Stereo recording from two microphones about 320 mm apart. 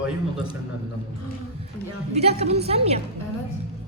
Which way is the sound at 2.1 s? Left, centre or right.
Centre.